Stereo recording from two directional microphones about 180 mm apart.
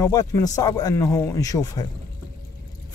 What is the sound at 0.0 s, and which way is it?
Speech, 15° left (ahead or behind).